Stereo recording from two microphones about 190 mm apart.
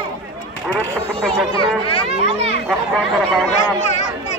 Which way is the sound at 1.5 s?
30° left (ahead or behind).